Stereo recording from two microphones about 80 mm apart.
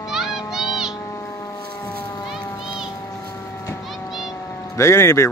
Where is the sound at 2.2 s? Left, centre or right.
Centre.